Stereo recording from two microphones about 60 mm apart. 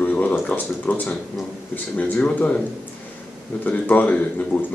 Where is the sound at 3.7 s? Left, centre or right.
Left.